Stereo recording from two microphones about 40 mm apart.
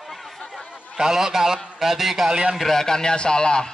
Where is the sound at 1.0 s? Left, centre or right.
Centre.